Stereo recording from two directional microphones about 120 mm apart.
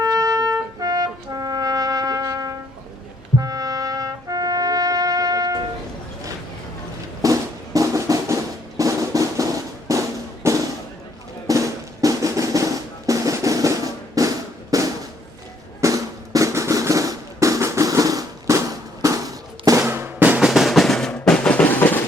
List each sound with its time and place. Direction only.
0.0 s music: 30° right (ahead or behind)
3.3 s trumpet: 30° right (ahead or behind)
7.2 s music: 30° right (ahead or behind)
8.8 s drum: 30° right (ahead or behind)
10.4 s music: 30° right (ahead or behind)
11.4 s drum: 30° right (ahead or behind)
19.9 s drum: 20° right (ahead or behind); by 22.0 s 15° left (ahead or behind)